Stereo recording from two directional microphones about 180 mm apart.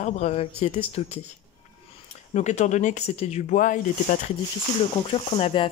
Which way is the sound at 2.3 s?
40° left (ahead or behind).